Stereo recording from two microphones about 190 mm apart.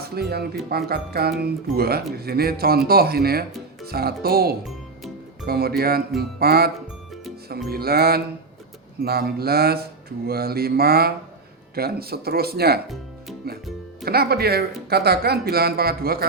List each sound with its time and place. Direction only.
0.0 s speech: 55° right (ahead or behind)
3.8 s mantra: 55° right (ahead or behind)
7.7 s mantra: 55° right (ahead or behind)
11.7 s speech: 55° right (ahead or behind)